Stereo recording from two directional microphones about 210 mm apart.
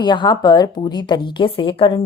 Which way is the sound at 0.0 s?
20° left (ahead or behind).